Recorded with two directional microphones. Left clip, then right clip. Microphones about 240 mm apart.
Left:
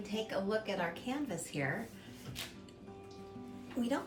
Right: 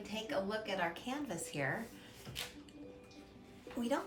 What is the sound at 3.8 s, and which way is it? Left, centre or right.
Speech, right.